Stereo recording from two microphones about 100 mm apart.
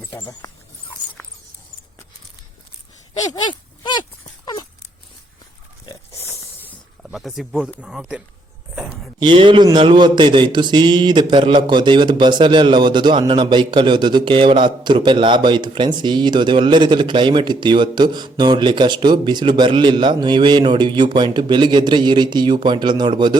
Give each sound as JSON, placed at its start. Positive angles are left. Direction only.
{"t": 3.2, "sound": "speech", "side_deg": 50}
{"t": 5.9, "sound": "pig", "side_deg": 30}
{"t": 7.0, "sound": "speech", "side_deg": 0}
{"t": 8.7, "sound": "a sound", "side_deg": -5}
{"t": 9.1, "sound": "a man's voice", "side_deg": -50}